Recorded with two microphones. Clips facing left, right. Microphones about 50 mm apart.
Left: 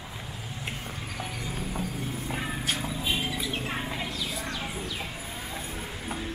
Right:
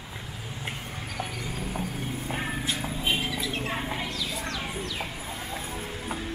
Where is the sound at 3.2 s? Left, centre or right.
Centre.